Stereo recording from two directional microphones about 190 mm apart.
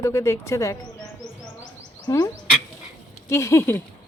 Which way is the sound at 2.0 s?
20° left (ahead or behind).